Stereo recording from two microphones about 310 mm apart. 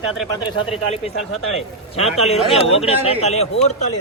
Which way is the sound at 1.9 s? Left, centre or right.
Centre.